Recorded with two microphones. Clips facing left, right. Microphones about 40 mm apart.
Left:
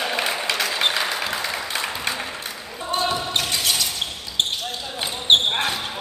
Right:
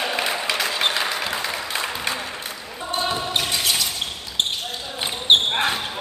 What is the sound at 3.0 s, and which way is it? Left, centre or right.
Basketball bounce, centre.